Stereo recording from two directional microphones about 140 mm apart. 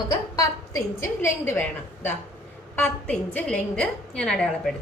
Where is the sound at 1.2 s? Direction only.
15° left (ahead or behind).